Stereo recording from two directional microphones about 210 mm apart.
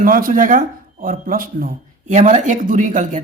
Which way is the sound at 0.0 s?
40° right (ahead or behind).